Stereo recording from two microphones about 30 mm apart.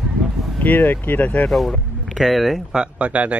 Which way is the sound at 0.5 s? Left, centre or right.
Left.